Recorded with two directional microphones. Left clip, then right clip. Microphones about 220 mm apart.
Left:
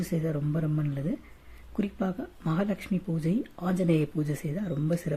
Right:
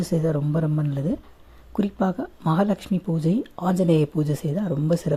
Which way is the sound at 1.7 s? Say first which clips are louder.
Right 7 dB; 20° right (ahead or behind).